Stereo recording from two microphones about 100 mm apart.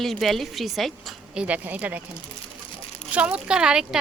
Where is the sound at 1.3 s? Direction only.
15° right (ahead or behind).